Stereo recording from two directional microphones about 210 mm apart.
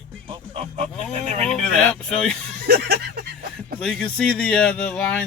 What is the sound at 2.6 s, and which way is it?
Speech, 50° right (ahead or behind).